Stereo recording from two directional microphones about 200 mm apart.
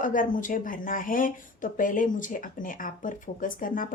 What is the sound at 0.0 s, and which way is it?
Speech, 40° left (ahead or behind).